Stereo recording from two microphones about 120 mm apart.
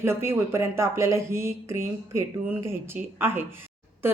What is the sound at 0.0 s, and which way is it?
A woman's voice, 20° right (ahead or behind).